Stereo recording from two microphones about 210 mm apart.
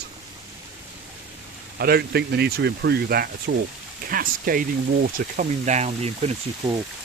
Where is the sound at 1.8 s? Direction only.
50° right (ahead or behind); by 6.7 s 30° right (ahead or behind).